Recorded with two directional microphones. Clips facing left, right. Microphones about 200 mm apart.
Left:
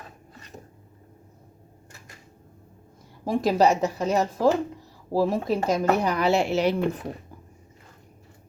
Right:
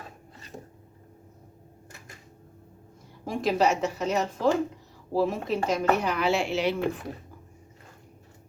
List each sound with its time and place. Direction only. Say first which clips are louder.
3.2 s speech: left 4 dB; 35° left (ahead or behind)